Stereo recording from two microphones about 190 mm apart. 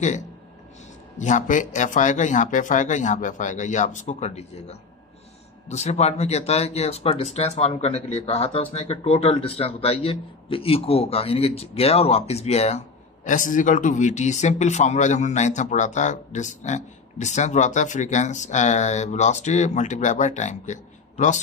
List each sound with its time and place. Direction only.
1.1 s speech: 40° left (ahead or behind)